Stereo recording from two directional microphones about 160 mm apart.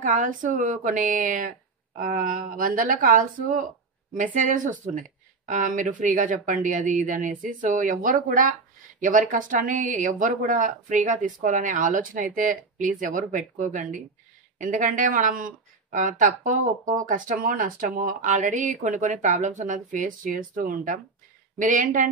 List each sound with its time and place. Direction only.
0.0 s a woman's voice: 50° right (ahead or behind)